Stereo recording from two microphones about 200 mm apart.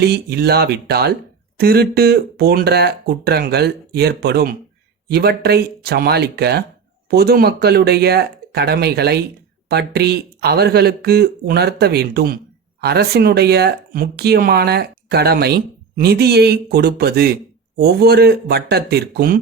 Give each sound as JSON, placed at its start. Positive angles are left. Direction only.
{"t": 0.0, "sound": "speech", "side_deg": -55}